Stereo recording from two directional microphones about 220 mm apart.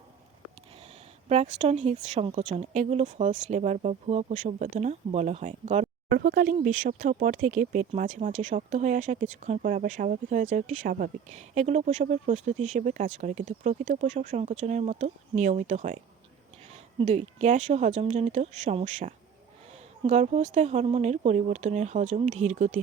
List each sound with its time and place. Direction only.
1.3 s a woman's voice: 30° right (ahead or behind)
6.1 s speech: 45° right (ahead or behind)